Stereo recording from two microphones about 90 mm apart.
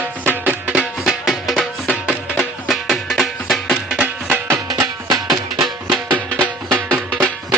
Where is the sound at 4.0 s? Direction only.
20° right (ahead or behind).